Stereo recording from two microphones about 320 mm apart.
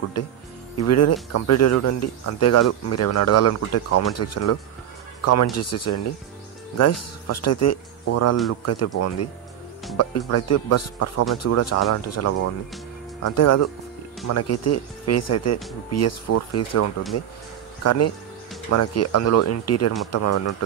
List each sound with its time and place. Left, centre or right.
0.8 s speech: left